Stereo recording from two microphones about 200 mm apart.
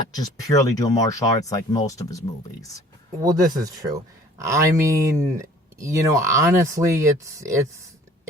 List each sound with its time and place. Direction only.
0.1 s speech: 20° left (ahead or behind)
3.2 s speech: 20° right (ahead or behind)